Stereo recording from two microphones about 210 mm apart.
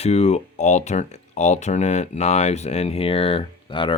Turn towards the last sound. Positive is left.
turn(degrees=25)  # may be behind; listen again after turning